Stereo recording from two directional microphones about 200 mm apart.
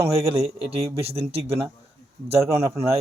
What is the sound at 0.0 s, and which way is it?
A man's voice, 30° right (ahead or behind).